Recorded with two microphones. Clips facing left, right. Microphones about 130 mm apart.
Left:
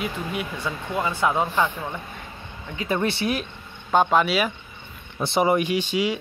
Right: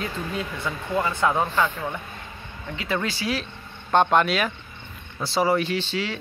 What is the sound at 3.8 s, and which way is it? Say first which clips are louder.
Speech: even; 5° left (ahead or behind).